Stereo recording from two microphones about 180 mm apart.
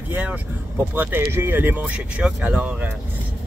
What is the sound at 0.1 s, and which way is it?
Speech, 10° right (ahead or behind).